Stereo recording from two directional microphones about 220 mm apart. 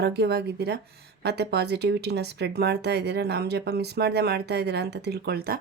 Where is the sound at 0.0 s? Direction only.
50° right (ahead or behind).